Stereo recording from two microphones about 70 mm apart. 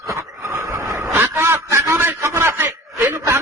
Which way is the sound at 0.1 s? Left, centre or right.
Right.